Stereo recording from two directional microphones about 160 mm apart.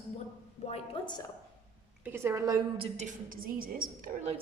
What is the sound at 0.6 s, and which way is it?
Speech, 40° left (ahead or behind).